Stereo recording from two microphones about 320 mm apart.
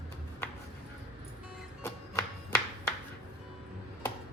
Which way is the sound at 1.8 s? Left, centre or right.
Centre.